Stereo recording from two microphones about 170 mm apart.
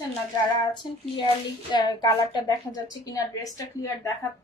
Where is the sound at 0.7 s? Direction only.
25° left (ahead or behind).